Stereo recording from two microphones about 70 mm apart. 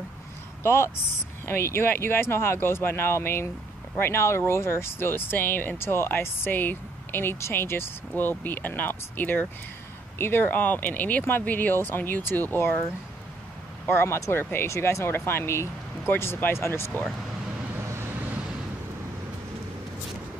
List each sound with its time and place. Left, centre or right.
0.7 s speech: left
13.8 s speech: left